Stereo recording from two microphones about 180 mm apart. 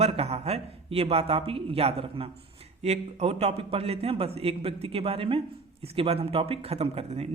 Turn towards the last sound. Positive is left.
turn(degrees=-35)  # may be behind; listen again after turning